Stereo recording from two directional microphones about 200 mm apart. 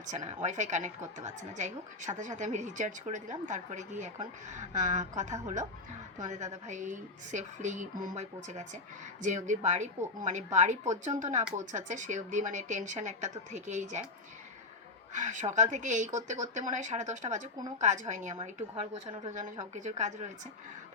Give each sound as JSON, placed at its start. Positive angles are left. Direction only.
{"t": 0.1, "sound": "a woman's voice", "side_deg": -35}
{"t": 15.1, "sound": "a woman's voice", "side_deg": -40}